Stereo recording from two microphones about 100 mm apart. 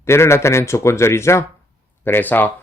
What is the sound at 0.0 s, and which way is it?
Speech, 25° left (ahead or behind).